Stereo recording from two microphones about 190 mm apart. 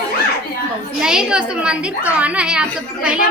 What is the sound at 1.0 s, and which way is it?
A woman's voice, 5° right (ahead or behind).